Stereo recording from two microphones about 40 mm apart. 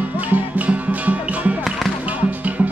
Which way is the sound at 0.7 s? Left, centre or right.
Right.